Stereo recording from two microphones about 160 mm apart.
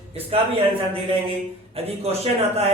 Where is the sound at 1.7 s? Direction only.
40° right (ahead or behind).